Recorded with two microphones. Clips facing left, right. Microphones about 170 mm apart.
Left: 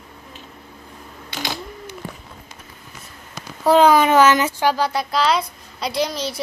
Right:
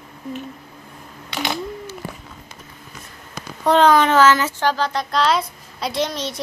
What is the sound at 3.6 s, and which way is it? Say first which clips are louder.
Speech: left 1 dB; 10° left (ahead or behind).